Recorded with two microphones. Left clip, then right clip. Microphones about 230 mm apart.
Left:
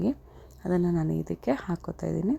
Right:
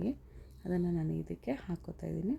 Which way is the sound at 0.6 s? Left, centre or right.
Centre.